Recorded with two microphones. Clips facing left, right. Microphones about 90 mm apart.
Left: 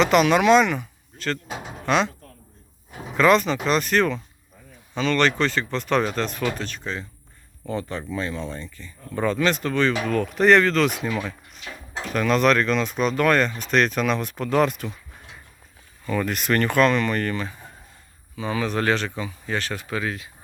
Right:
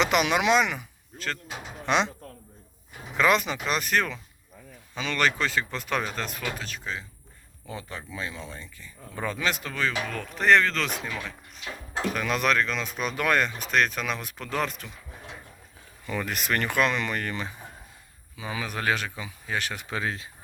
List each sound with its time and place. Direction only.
0.0 s speech: 15° right (ahead or behind)
1.9 s speech: 20° right (ahead or behind)
3.2 s speech: 10° right (ahead or behind); by 11.3 s 5° left (ahead or behind)
12.1 s speech: 5° right (ahead or behind)
16.0 s speech: 10° right (ahead or behind); by 20.3 s 30° right (ahead or behind)